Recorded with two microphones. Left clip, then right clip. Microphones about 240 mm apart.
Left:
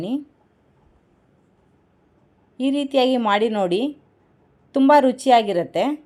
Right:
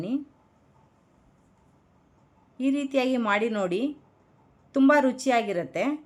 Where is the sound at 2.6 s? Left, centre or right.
Centre.